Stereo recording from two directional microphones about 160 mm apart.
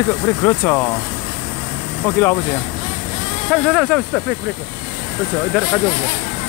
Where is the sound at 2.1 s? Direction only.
10° left (ahead or behind).